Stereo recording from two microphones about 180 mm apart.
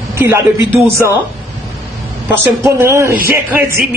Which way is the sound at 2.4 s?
15° right (ahead or behind).